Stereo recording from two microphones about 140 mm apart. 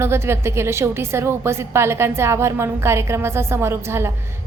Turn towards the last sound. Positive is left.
turn(degrees=-20)  # may be behind; listen again after turning